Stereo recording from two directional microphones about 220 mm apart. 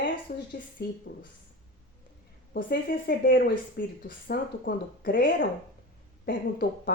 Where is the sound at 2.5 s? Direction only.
40° left (ahead or behind).